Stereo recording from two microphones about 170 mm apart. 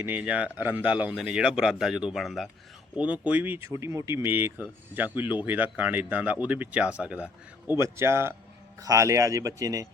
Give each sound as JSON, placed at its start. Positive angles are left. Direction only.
{"t": 0.0, "sound": "a man's voice", "side_deg": -10}